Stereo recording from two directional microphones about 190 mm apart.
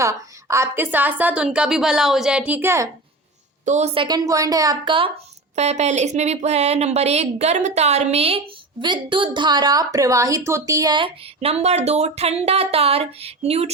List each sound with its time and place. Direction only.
0.0 s a woman's voice: 15° right (ahead or behind)
2.5 s a woman's voice: 10° right (ahead or behind)
3.7 s a woman's voice: 35° right (ahead or behind)